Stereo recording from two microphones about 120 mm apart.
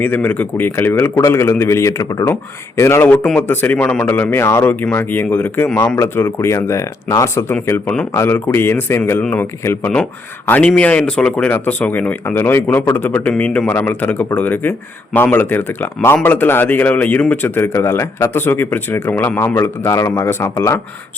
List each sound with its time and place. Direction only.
0.0 s a man's voice: 15° left (ahead or behind)
7.7 s a man's voice: 10° left (ahead or behind)